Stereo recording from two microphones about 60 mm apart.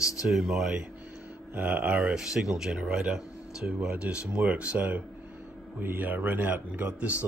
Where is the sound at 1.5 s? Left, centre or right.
Right.